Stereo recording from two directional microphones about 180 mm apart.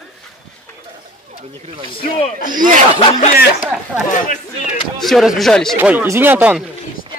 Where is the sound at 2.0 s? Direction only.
45° left (ahead or behind).